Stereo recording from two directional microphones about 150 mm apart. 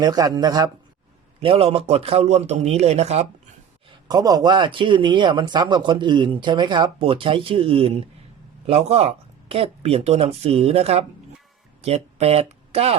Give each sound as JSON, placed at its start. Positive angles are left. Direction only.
{"t": 0.0, "sound": "a man's voice", "side_deg": -25}
{"t": 1.4, "sound": "speech", "side_deg": -40}
{"t": 4.1, "sound": "speech", "side_deg": -25}